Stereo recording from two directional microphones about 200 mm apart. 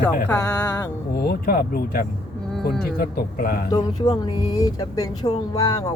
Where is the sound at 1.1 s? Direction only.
50° left (ahead or behind).